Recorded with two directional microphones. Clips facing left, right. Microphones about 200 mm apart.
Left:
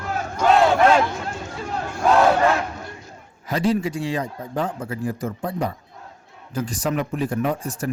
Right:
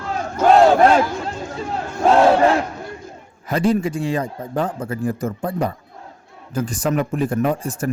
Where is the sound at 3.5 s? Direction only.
50° right (ahead or behind).